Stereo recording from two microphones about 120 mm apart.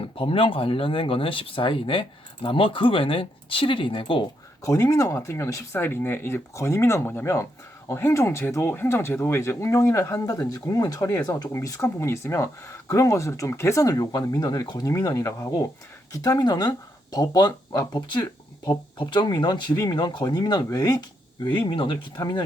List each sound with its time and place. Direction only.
0.0 s speech: 50° left (ahead or behind)
4.6 s speech: 25° left (ahead or behind)
21.4 s speech: 40° left (ahead or behind)